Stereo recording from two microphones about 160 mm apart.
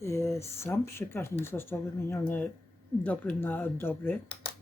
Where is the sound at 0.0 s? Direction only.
20° left (ahead or behind).